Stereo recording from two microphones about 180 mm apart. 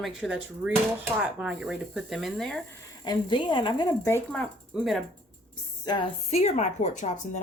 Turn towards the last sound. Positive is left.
turn(degrees=45)  # may be behind; listen again after turning